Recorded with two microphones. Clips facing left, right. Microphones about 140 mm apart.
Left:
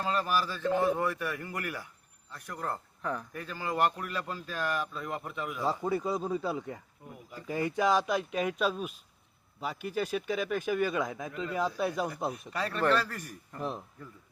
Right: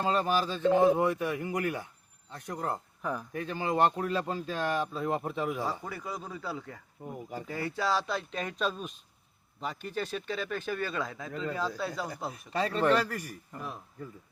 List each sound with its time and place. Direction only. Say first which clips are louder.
0.0 s speech: right 2 dB; 25° right (ahead or behind); by 3.2 s 10° right (ahead or behind)
3.3 s speech: right 6 dB; 25° right (ahead or behind)
5.6 s speech: left 6 dB; 25° left (ahead or behind)
7.0 s speech: right 7 dB; 40° right (ahead or behind)
7.4 s speech: left 5 dB; 15° left (ahead or behind)
12.5 s speech: right 3 dB; 25° right (ahead or behind)
13.6 s speech: left 6 dB; 25° left (ahead or behind)